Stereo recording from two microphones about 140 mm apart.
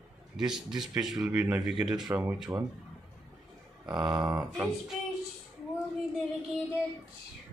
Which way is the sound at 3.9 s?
30° right (ahead or behind).